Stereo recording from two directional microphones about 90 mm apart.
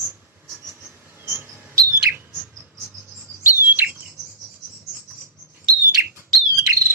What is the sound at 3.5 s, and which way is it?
Bird, 25° right (ahead or behind).